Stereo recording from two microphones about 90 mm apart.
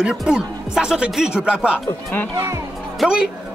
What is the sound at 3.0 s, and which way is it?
Speech, 10° right (ahead or behind).